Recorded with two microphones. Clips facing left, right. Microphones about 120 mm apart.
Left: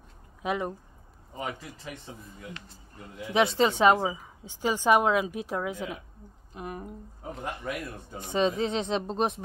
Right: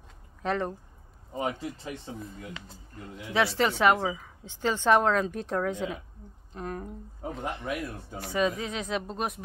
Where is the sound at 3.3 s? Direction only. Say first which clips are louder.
Left 2 dB; 20° left (ahead or behind).